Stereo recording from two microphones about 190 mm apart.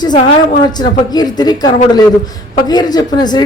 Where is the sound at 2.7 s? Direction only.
20° left (ahead or behind).